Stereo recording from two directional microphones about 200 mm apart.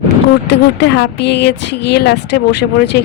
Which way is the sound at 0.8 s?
55° left (ahead or behind).